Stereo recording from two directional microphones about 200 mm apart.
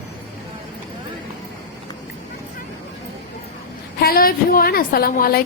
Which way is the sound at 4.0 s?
50° left (ahead or behind).